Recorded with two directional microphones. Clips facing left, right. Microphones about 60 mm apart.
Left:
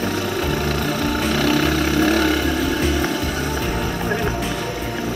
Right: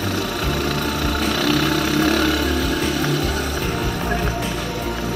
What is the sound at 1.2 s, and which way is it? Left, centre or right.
Vehicle, left.